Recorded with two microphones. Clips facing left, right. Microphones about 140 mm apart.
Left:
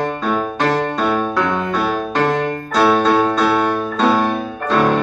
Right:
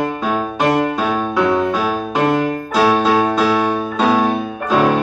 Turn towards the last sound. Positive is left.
turn(degrees=-10)  # may be behind; listen again after turning